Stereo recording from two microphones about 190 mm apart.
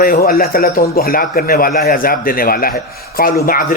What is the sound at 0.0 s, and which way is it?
Speech, 50° left (ahead or behind).